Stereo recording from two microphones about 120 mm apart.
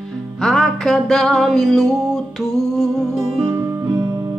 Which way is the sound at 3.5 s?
20° right (ahead or behind).